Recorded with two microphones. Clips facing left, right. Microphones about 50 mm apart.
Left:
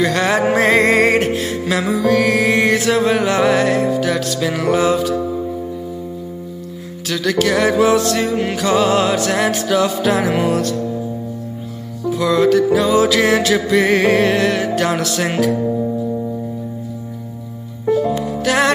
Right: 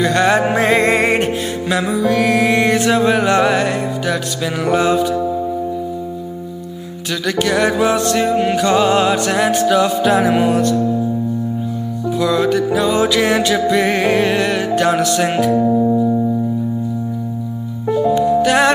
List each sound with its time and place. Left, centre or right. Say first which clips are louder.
0.0 s music: right 2 dB; centre
7.1 s music: left 1 dB; centre
12.2 s music: left 2 dB; centre
15.5 s music: right 5 dB; right
18.0 s music: right 5 dB; centre